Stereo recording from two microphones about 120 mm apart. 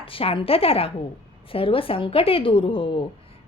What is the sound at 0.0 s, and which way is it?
A woman's voice, 50° left (ahead or behind).